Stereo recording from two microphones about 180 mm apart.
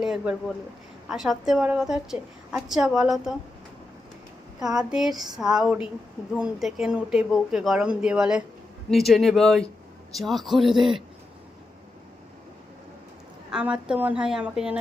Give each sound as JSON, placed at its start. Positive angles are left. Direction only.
{"t": 0.0, "sound": "speech", "side_deg": -5}
{"t": 4.6, "sound": "speech", "side_deg": -5}
{"t": 13.5, "sound": "speech", "side_deg": -5}